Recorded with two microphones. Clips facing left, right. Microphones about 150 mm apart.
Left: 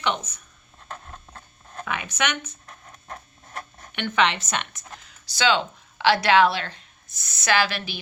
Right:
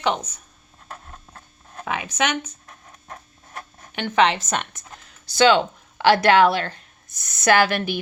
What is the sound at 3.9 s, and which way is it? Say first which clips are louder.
A woman's voice: right 4 dB; 35° right (ahead or behind).